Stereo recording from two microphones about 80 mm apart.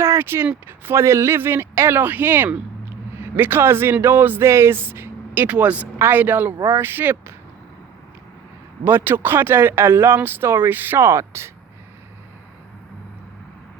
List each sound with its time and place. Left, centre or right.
0.0 s a sound: right
0.9 s speech: right
8.8 s speech: right